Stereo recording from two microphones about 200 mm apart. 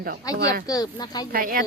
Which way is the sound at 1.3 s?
45° right (ahead or behind).